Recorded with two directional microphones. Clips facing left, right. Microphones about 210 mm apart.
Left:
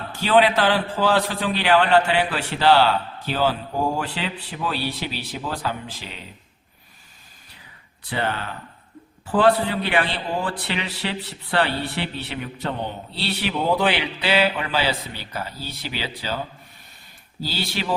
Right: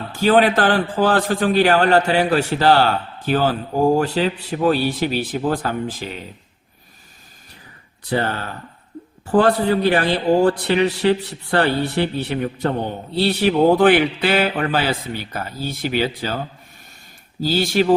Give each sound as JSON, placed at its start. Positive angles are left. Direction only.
{"t": 0.2, "sound": "a man's voice", "side_deg": -45}
{"t": 8.0, "sound": "a man's voice", "side_deg": -40}
{"t": 17.4, "sound": "a man's voice", "side_deg": -45}